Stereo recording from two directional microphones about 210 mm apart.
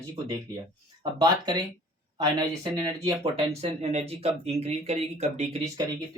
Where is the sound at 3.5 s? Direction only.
30° right (ahead or behind).